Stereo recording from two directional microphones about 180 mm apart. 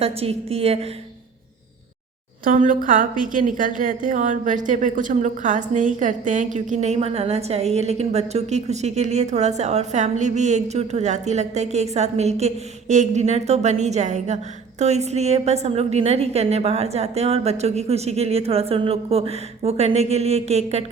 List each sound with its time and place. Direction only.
0.0 s a woman's voice: 35° right (ahead or behind)
2.4 s a woman's voice: 45° right (ahead or behind)